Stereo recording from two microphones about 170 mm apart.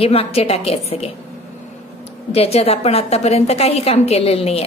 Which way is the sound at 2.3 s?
35° left (ahead or behind).